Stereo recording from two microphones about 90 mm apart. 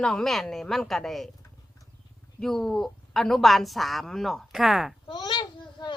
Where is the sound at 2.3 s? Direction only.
5° left (ahead or behind).